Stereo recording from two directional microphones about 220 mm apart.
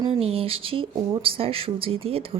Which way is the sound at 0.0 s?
25° right (ahead or behind).